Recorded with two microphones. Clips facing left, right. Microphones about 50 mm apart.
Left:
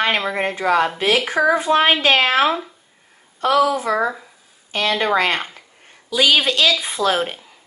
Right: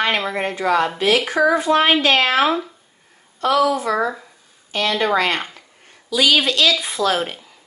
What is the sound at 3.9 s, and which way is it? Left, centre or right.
Speech, centre.